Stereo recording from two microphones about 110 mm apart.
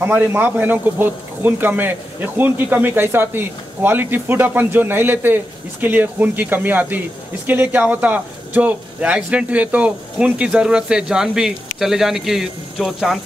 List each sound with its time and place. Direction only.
0.0 s a man's voice: 15° right (ahead or behind); by 13.2 s centre (ahead or behind)